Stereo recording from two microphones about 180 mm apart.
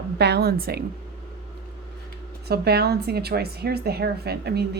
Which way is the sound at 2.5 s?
65° right (ahead or behind).